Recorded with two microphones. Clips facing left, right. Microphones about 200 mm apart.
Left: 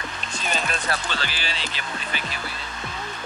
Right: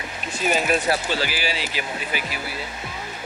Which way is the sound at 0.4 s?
5° right (ahead or behind).